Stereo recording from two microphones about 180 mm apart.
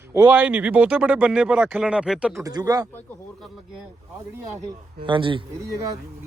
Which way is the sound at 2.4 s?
20° right (ahead or behind).